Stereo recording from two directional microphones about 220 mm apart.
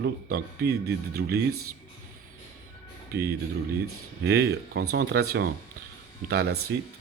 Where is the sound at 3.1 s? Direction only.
45° right (ahead or behind).